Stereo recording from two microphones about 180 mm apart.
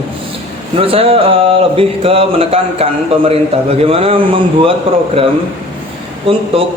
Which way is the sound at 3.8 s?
30° right (ahead or behind).